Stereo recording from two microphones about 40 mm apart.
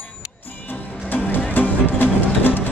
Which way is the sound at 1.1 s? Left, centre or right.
Left.